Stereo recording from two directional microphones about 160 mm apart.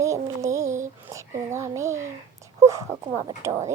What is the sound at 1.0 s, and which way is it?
Speech, 20° right (ahead or behind).